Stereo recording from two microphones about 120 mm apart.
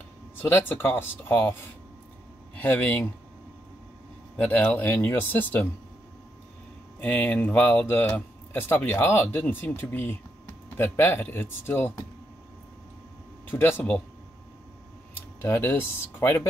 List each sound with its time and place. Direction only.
0.4 s speech: 20° left (ahead or behind)
2.5 s speech: 15° left (ahead or behind)
4.4 s speech: 15° left (ahead or behind)
7.0 s speech: 15° left (ahead or behind)
13.5 s speech: 15° left (ahead or behind)
15.4 s speech: 20° left (ahead or behind)